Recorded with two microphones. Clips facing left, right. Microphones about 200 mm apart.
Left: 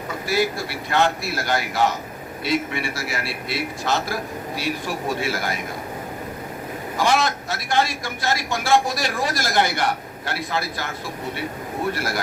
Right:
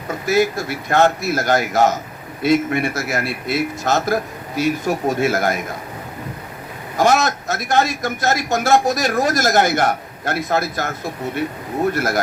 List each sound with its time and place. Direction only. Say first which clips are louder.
0.3 s a man's voice: right 5 dB; 45° right (ahead or behind)
6.9 s a man's voice: right 5 dB; 45° right (ahead or behind)